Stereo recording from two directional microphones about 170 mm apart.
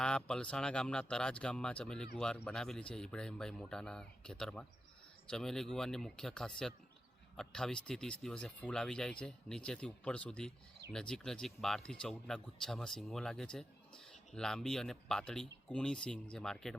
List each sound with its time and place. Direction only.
0.0 s speech: 5° left (ahead or behind)